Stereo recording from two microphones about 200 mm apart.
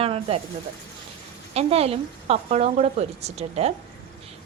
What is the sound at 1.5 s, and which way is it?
A woman's voice, 30° right (ahead or behind).